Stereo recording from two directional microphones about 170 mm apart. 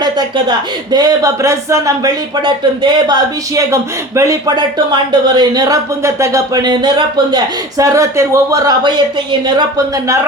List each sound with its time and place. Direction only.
0.0 s speech: 25° right (ahead or behind)